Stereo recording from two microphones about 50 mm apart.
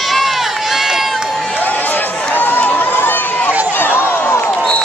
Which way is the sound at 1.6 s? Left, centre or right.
Left.